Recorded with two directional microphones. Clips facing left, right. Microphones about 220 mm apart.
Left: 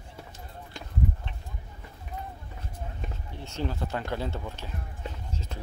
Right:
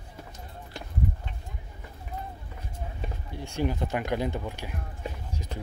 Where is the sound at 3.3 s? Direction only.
15° right (ahead or behind).